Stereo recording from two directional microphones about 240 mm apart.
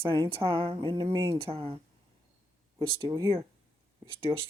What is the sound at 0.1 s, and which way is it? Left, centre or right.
Speech, right.